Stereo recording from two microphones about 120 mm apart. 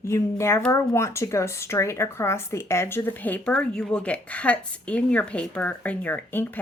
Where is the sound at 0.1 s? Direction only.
25° left (ahead or behind).